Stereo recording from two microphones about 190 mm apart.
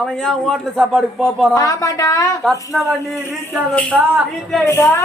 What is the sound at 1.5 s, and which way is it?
Speech, 20° left (ahead or behind).